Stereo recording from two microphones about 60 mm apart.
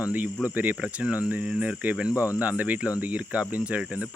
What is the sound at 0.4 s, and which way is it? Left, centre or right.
Speech, right.